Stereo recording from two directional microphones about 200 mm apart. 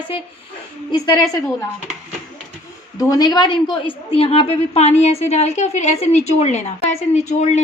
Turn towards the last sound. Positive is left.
turn(degrees=35)  # may be behind; listen again after turning